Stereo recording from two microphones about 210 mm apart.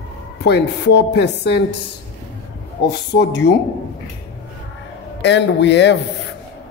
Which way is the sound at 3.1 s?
55° left (ahead or behind).